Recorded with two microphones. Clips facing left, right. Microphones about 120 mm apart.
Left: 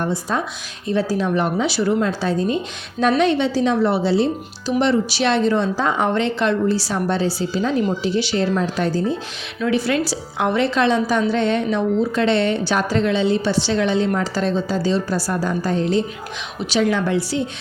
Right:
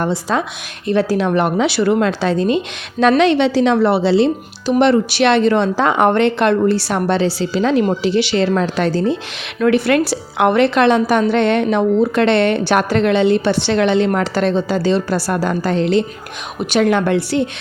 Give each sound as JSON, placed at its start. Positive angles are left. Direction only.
{"t": 0.0, "sound": "a woman's voice", "side_deg": -90}
{"t": 0.9, "sound": "a woman's voice", "side_deg": -70}
{"t": 4.8, "sound": "a woman's voice", "side_deg": -60}
{"t": 9.6, "sound": "a woman's voice", "side_deg": -60}
{"t": 16.6, "sound": "a woman's voice", "side_deg": -55}